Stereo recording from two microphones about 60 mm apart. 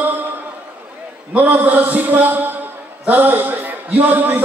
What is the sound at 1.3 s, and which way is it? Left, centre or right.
A man's voice, right.